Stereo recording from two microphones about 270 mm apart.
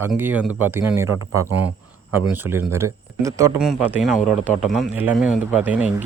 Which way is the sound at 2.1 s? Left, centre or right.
Centre.